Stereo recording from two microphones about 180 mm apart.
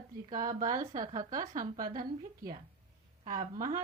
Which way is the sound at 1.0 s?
20° right (ahead or behind).